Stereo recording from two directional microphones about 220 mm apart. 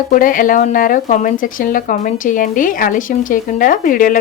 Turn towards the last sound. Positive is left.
turn(degrees=40)  # may be behind; listen again after turning